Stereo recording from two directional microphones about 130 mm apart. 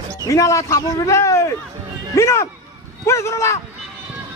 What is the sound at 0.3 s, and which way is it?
A man's voice, 25° left (ahead or behind).